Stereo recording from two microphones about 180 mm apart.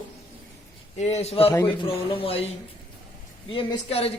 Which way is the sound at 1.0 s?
35° left (ahead or behind).